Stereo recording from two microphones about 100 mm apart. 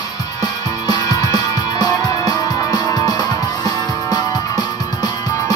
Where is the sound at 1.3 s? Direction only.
40° left (ahead or behind).